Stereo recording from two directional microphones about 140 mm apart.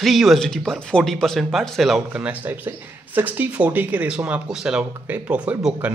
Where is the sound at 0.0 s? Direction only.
Centre (ahead or behind).